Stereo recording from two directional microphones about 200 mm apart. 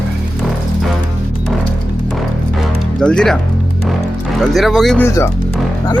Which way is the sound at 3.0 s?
5° left (ahead or behind).